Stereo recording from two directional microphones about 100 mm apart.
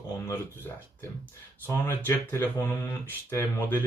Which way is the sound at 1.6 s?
20° left (ahead or behind).